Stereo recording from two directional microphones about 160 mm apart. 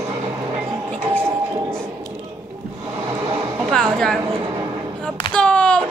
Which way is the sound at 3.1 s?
25° right (ahead or behind).